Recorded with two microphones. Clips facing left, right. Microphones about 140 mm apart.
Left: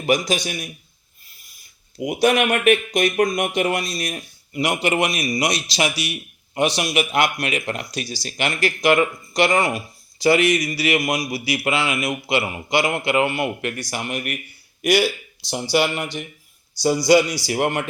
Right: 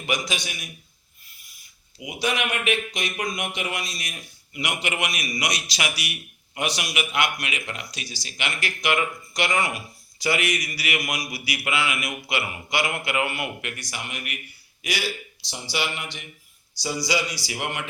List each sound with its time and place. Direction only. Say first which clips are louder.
0.0 s speech: left 8 dB; 40° left (ahead or behind)
2.0 s a man's voice: left 9 dB; 50° left (ahead or behind)
15.7 s speech: left 9 dB; 45° left (ahead or behind)